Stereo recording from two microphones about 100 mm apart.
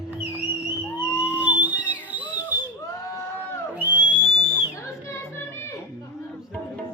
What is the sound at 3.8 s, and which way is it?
Whistle, 20° right (ahead or behind).